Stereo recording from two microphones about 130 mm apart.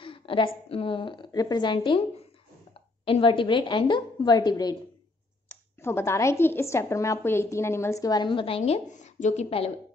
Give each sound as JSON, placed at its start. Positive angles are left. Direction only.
{"t": 0.0, "sound": "a sound", "side_deg": 40}
{"t": 0.7, "sound": "a woman's voice", "side_deg": 45}
{"t": 5.8, "sound": "a woman's voice", "side_deg": 20}